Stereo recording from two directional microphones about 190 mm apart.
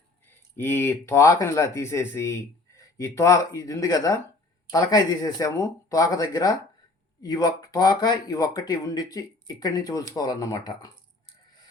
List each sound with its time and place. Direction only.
0.5 s speech: 10° left (ahead or behind)